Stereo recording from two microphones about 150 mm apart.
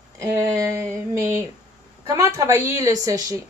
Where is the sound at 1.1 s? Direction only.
15° right (ahead or behind).